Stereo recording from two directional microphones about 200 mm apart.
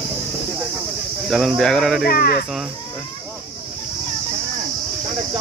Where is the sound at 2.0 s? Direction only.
50° left (ahead or behind).